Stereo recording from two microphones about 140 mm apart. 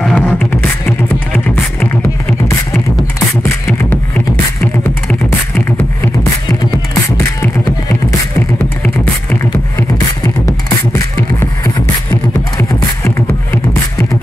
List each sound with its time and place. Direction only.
0.0 s beatboxing: 10° left (ahead or behind)
8.8 s beatboxing: 15° left (ahead or behind)
11.6 s beatboxing: 25° left (ahead or behind)